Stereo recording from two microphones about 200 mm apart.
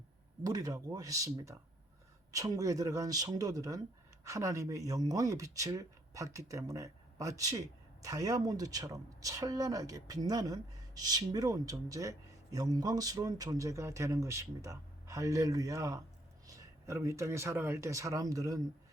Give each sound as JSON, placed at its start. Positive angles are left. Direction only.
{"t": 0.4, "sound": "speech", "side_deg": -20}